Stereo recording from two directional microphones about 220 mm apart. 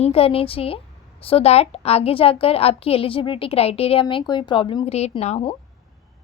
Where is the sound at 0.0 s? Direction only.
25° left (ahead or behind).